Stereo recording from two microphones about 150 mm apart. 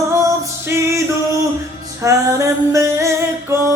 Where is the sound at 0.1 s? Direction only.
20° right (ahead or behind).